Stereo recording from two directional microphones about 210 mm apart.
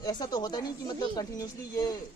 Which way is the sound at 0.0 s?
20° left (ahead or behind).